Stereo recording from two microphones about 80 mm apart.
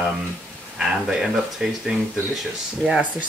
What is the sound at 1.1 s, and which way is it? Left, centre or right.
Speech, centre.